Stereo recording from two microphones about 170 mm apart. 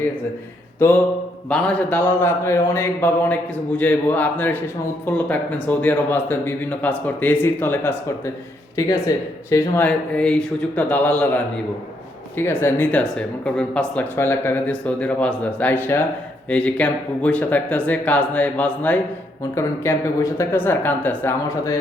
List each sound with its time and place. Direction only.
1.5 s a man's voice: 5° left (ahead or behind)